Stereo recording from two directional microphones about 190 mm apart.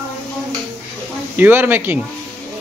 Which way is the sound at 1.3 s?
10° right (ahead or behind).